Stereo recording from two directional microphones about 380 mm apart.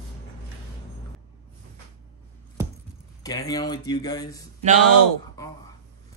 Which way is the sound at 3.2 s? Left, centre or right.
Centre.